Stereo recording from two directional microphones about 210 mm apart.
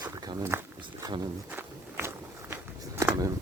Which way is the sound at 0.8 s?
20° right (ahead or behind).